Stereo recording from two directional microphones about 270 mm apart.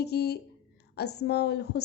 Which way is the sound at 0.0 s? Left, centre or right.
Left.